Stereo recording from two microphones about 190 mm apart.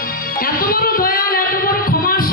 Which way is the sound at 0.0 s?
50° left (ahead or behind).